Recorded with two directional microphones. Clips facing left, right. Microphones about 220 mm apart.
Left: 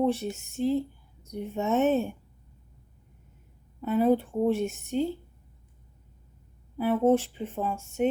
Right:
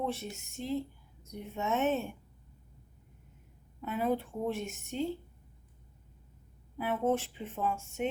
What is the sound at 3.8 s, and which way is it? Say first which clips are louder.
Speech: left 8 dB; 40° left (ahead or behind).